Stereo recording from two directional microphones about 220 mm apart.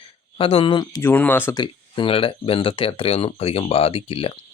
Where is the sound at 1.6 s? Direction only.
20° left (ahead or behind).